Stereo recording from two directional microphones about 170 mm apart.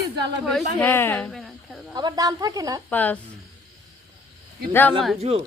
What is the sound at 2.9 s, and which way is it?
Speech, 10° left (ahead or behind).